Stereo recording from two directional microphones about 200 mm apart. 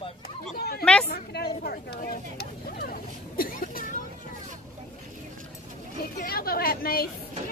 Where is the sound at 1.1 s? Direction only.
50° left (ahead or behind).